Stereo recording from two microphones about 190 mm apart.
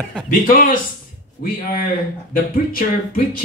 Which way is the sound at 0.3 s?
45° left (ahead or behind).